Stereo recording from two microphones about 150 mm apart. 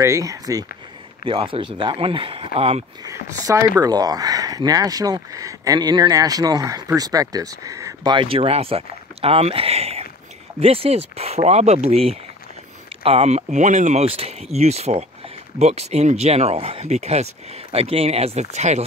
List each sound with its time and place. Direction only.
0.0 s speech: 20° right (ahead or behind)
1.2 s speech: 35° right (ahead or behind)
3.0 s speech: 25° right (ahead or behind); by 18.9 s 50° right (ahead or behind)